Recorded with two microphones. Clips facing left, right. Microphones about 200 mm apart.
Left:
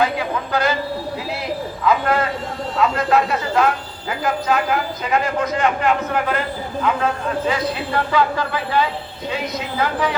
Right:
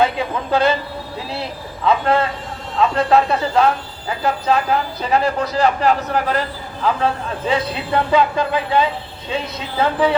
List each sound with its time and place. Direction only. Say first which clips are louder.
0.0 s a man's voice: right 2 dB; 25° right (ahead or behind)
1.8 s a man's voice: right 2 dB; 30° right (ahead or behind)